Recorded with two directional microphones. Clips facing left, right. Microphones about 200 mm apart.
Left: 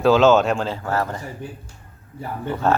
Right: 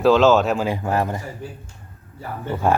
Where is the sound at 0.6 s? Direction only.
15° right (ahead or behind).